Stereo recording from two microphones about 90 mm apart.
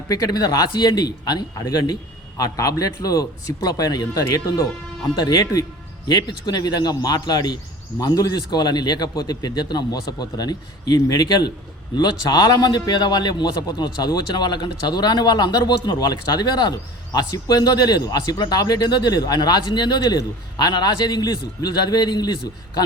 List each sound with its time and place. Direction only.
0.1 s speech: 45° left (ahead or behind)
5.1 s speech: 50° left (ahead or behind)